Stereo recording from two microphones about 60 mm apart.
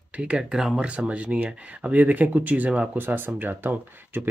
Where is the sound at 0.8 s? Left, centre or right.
Right.